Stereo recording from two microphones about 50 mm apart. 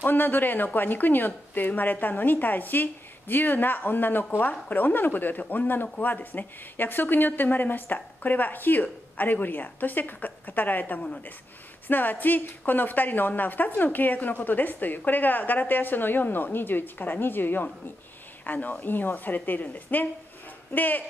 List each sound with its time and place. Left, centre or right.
0.0 s speech: left
11.0 s speech: left
11.9 s speech: left